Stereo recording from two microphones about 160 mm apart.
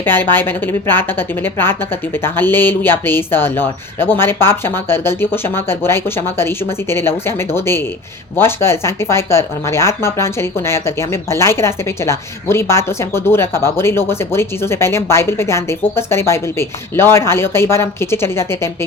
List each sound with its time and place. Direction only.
0.0 s speech: 15° left (ahead or behind)
2.2 s speech: 15° left (ahead or behind)